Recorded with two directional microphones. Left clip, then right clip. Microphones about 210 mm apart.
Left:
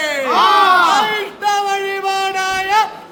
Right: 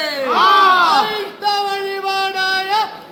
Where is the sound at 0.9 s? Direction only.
10° left (ahead or behind).